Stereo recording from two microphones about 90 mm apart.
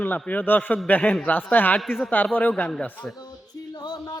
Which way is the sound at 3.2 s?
50° left (ahead or behind).